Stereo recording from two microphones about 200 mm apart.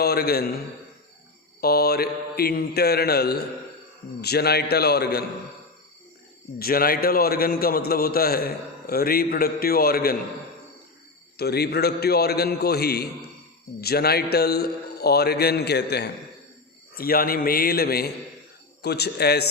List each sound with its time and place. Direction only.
0.0 s a man's voice: 50° left (ahead or behind)
1.6 s a man's voice: 50° left (ahead or behind)
6.6 s a man's voice: 45° left (ahead or behind)
11.3 s a man's voice: 55° left (ahead or behind)